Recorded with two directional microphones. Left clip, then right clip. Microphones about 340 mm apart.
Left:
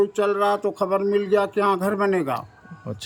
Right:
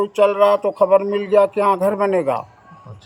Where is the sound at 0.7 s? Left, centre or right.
Left.